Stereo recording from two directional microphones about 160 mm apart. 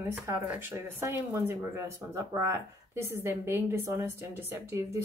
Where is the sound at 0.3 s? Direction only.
10° right (ahead or behind).